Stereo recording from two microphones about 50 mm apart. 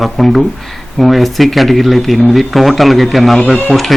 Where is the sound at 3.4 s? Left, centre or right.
Centre.